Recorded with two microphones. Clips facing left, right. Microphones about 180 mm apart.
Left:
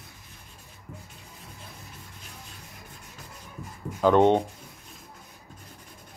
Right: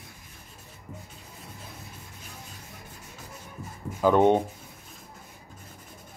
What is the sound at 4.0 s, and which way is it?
Speech, 10° right (ahead or behind).